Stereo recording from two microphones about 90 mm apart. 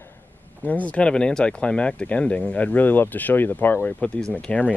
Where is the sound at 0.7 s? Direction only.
15° left (ahead or behind).